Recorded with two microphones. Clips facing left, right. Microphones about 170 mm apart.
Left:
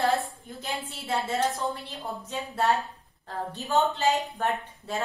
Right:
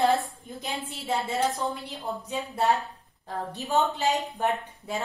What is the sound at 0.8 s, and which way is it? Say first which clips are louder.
Speech: right 1 dB; 15° right (ahead or behind).